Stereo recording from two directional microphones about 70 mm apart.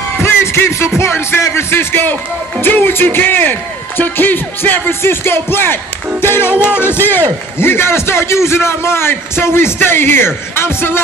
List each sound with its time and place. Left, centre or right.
0.2 s music: left
0.9 s a man's voice: left